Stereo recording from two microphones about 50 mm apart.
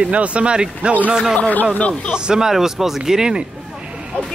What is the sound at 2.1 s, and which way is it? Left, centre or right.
A man's voice, centre.